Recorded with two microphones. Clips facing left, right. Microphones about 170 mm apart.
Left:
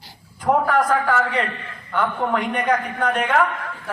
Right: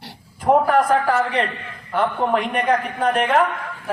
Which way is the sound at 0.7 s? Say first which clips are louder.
Right 2 dB; 30° right (ahead or behind).